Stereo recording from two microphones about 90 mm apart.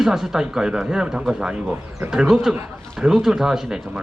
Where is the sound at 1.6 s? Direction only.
20° right (ahead or behind).